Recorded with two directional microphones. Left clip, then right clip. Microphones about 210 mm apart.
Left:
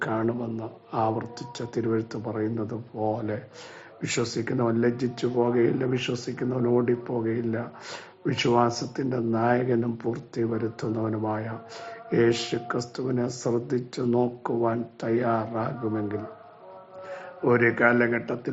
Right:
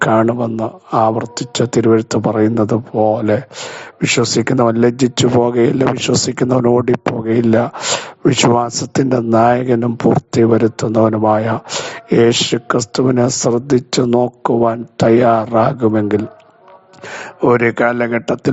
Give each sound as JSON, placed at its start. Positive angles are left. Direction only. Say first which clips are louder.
{"t": 0.0, "sound": "a man's voice", "louder": "right 15 dB", "side_deg": -45}